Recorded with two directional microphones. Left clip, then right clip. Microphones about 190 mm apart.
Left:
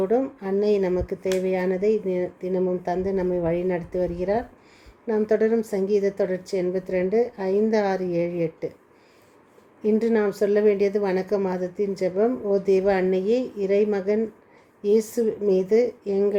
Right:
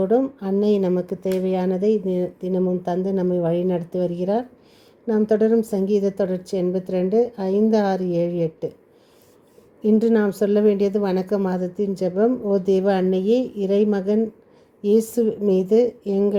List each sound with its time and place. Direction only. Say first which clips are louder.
0.0 s a woman's voice: right 3 dB; 25° right (ahead or behind)
9.8 s a woman's voice: right 3 dB; 25° right (ahead or behind)